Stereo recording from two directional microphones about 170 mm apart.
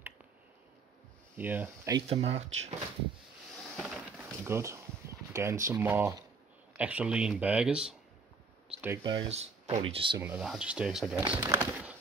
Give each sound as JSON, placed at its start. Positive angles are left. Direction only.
{"t": 1.3, "sound": "speech", "side_deg": -10}
{"t": 2.0, "sound": "speech", "side_deg": -40}
{"t": 3.7, "sound": "a sound", "side_deg": 0}
{"t": 4.2, "sound": "speech", "side_deg": -15}
{"t": 8.7, "sound": "a sound", "side_deg": -5}
{"t": 9.0, "sound": "speech", "side_deg": -25}
{"t": 9.3, "sound": "speech", "side_deg": -40}
{"t": 10.1, "sound": "speech", "side_deg": -10}